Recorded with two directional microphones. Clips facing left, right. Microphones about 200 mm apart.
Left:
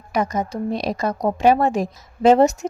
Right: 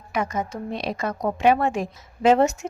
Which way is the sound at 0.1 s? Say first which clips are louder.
Left 4 dB; 40° left (ahead or behind).